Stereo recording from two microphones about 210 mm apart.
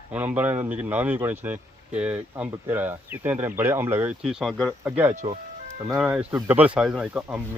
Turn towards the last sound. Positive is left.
turn(degrees=-5)  # may be behind; listen again after turning